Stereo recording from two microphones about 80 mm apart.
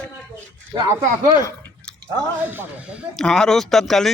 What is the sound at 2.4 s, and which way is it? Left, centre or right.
Speech, right.